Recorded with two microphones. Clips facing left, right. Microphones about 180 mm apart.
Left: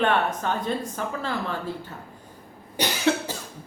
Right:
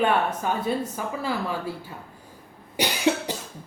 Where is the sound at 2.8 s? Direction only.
15° right (ahead or behind).